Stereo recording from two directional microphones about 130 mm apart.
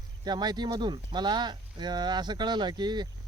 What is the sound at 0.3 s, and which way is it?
Speech, 35° right (ahead or behind).